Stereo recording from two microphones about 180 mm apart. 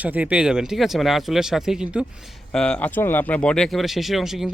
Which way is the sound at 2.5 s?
5° left (ahead or behind).